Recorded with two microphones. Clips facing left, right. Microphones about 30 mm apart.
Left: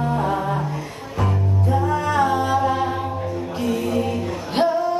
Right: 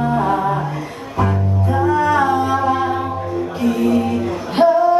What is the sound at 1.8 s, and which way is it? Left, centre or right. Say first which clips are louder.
Music: right 6 dB; centre.